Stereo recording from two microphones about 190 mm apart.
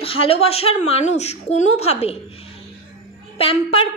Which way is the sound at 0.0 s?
30° left (ahead or behind).